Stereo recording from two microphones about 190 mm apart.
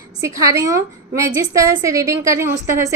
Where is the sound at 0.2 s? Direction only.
15° right (ahead or behind).